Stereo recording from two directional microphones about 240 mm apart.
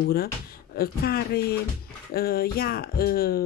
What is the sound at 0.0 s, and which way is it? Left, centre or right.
Speech, left.